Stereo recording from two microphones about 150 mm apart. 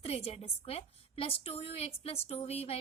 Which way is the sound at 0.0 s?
40° left (ahead or behind).